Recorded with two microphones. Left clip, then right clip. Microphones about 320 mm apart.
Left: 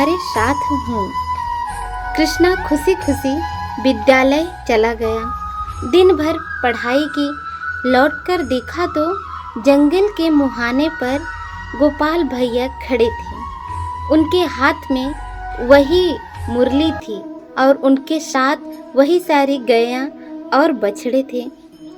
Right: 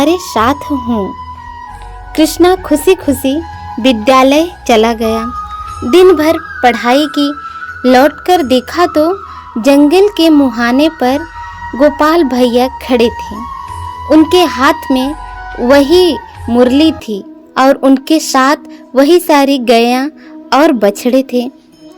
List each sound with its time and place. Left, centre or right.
0.0 s a woman's voice: right
2.1 s a woman's voice: centre